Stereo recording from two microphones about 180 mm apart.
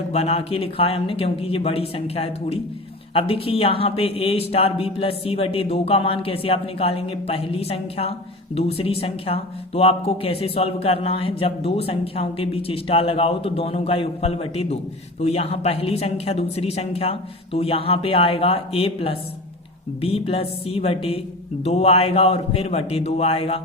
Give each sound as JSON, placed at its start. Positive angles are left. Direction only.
{"t": 0.1, "sound": "speech", "side_deg": 35}